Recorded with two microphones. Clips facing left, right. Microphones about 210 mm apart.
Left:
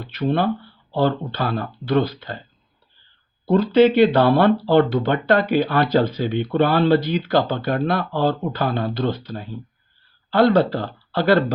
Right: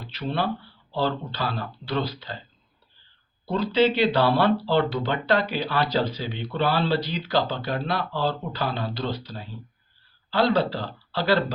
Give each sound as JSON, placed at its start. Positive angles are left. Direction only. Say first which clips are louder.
{"t": 0.1, "sound": "speech", "louder": "left 7 dB", "side_deg": 50}
{"t": 3.4, "sound": "speech", "louder": "left 7 dB", "side_deg": 50}